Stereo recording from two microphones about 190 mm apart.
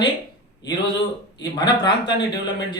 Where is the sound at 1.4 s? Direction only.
20° left (ahead or behind).